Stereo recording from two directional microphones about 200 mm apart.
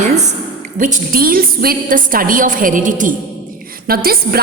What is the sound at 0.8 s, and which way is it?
A woman's voice, 45° right (ahead or behind).